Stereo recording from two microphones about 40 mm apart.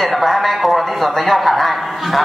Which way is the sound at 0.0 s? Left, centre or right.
Centre.